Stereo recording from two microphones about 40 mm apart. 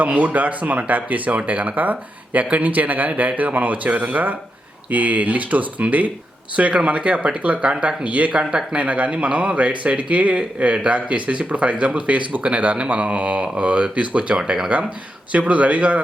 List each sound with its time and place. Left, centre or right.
0.0 s speech: right
8.3 s speech: centre
8.7 s speech: right